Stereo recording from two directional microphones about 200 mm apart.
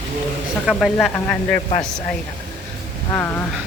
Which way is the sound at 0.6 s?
Centre (ahead or behind).